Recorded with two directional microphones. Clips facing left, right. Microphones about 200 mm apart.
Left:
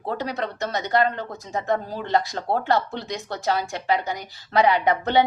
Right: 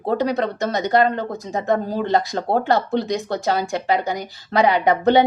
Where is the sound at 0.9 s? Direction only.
40° right (ahead or behind).